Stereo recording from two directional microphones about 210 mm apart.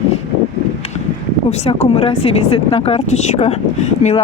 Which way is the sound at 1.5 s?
30° left (ahead or behind).